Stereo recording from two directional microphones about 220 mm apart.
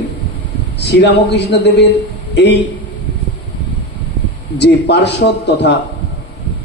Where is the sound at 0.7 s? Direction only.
50° left (ahead or behind).